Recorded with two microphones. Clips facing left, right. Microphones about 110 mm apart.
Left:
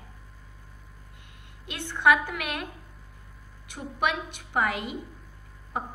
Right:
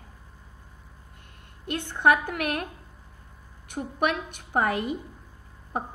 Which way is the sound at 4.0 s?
50° right (ahead or behind).